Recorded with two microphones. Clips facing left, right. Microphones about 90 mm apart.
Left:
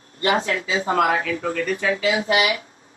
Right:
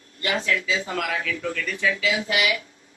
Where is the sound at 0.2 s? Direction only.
35° left (ahead or behind).